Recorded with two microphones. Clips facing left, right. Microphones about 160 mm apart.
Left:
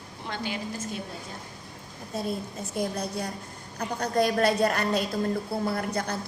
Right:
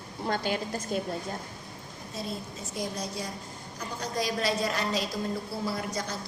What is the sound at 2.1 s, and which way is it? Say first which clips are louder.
A woman's voice: left 5 dB; 55° left (ahead or behind).